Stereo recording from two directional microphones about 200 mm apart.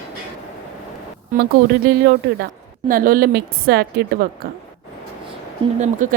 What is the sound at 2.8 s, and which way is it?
A woman's voice, 45° right (ahead or behind).